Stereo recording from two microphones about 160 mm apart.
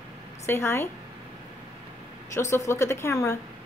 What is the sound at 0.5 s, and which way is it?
Speech, 15° left (ahead or behind).